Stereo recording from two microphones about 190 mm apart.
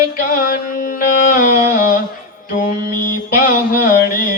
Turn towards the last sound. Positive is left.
turn(degrees=50)  # may be behind; listen again after turning